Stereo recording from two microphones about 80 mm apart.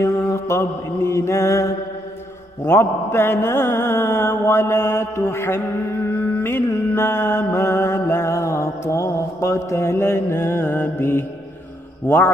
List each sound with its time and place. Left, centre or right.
0.0 s mantra: left